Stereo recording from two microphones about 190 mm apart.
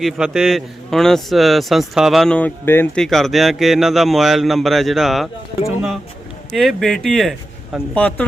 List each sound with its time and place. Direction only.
0.0 s a man's voice: centre (ahead or behind)